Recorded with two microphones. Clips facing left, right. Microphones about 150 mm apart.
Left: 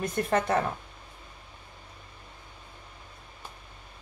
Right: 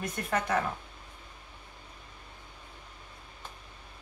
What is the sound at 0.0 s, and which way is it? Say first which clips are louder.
Speech: left 5 dB; 30° left (ahead or behind).